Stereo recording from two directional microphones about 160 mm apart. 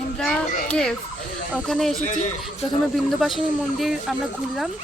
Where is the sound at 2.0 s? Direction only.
45° left (ahead or behind).